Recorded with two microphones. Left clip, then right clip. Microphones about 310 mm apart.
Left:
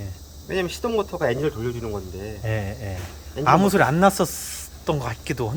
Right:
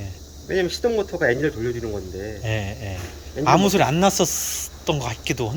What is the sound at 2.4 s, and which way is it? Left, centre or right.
Speech, centre.